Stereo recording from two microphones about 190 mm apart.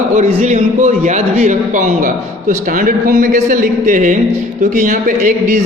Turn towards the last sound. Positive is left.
turn(degrees=-40)  # may be behind; listen again after turning